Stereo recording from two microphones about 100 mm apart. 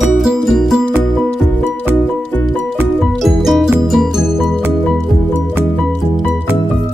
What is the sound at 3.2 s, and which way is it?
Music, centre (ahead or behind).